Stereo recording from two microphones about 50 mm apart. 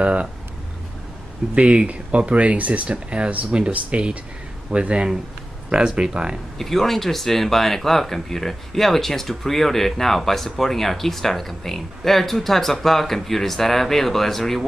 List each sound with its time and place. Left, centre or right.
0.0 s speech: right
1.5 s speech: right
6.6 s speech: centre